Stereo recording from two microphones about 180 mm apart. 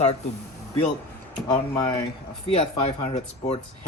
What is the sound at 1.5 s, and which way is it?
A man's voice, 20° left (ahead or behind).